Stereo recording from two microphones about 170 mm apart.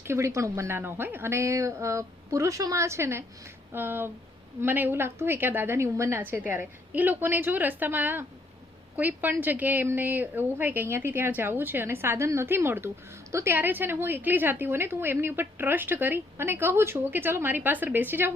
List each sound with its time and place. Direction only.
0.0 s a woman's voice: 15° right (ahead or behind)